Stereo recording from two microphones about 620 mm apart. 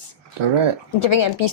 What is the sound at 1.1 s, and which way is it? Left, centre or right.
Speech, left.